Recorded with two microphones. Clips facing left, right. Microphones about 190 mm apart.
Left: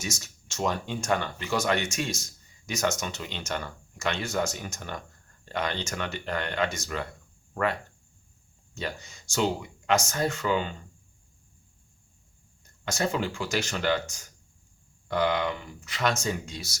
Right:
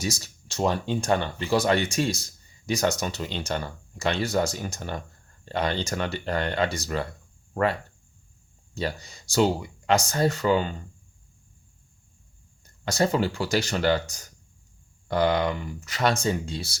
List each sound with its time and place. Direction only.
0.0 s speech: 35° right (ahead or behind)
12.8 s speech: 35° right (ahead or behind)